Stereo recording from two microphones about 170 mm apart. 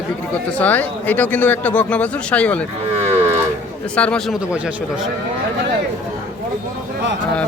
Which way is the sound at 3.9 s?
5° left (ahead or behind).